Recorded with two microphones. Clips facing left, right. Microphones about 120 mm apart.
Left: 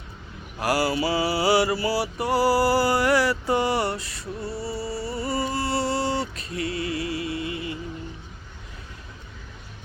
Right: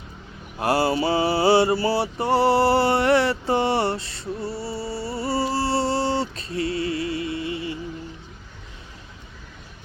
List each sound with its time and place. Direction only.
0.6 s mantra: 25° right (ahead or behind)